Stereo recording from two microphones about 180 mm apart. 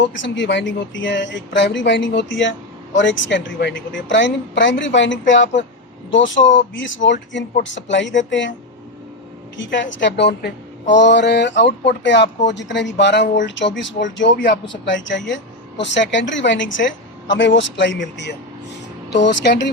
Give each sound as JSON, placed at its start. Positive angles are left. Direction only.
{"t": 0.2, "sound": "speech", "side_deg": 85}
{"t": 9.6, "sound": "a woman's voice", "side_deg": 90}